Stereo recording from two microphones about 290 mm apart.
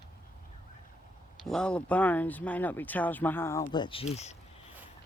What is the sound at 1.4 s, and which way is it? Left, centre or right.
Speech, centre.